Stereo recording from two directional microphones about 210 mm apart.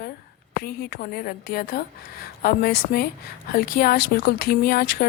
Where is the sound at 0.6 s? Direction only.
45° left (ahead or behind).